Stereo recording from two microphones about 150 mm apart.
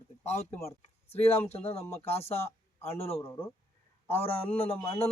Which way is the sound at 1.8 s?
15° left (ahead or behind).